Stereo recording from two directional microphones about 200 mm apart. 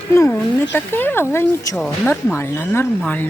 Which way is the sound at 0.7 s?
10° left (ahead or behind).